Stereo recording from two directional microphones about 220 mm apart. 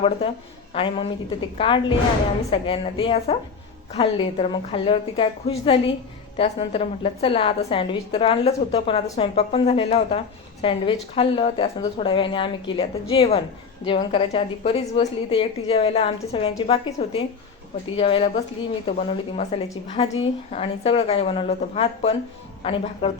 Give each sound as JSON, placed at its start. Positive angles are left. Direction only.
{"t": 0.7, "sound": "a woman's voice", "side_deg": 25}